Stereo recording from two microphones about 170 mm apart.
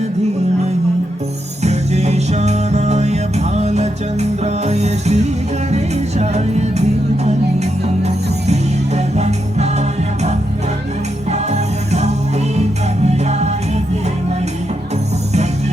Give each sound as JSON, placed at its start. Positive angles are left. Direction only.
{"t": 1.6, "sound": "music", "side_deg": -40}
{"t": 11.3, "sound": "music", "side_deg": -40}